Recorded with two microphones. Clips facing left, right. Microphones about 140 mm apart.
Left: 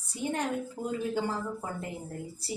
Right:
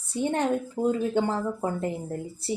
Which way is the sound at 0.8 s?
50° right (ahead or behind).